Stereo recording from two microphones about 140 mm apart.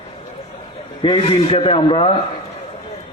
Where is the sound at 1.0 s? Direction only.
40° left (ahead or behind).